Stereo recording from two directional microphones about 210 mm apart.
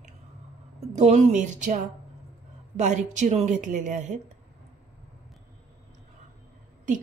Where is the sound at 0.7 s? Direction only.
30° right (ahead or behind).